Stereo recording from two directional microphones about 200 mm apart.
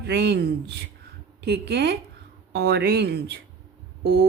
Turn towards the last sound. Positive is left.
turn(degrees=-55)  # may be behind; listen again after turning